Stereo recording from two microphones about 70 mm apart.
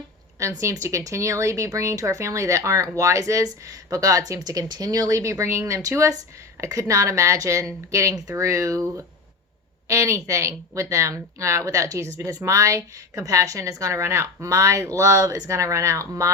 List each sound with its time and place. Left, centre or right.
0.3 s speech: right
9.9 s speech: right